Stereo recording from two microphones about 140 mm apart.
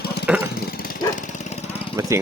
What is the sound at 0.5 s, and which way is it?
Lawn mower, 90° left.